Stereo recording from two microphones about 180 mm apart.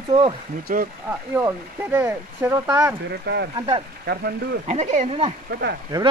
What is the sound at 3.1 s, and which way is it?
Speech, 65° right (ahead or behind).